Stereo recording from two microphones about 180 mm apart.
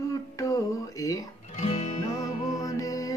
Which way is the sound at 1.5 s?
40° left (ahead or behind).